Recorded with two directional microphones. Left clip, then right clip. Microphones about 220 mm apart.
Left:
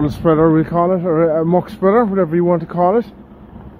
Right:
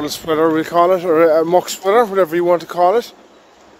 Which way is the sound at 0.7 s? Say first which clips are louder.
Right 3 dB; 35° right (ahead or behind).